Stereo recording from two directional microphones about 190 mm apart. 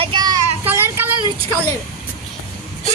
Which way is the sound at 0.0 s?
25° right (ahead or behind).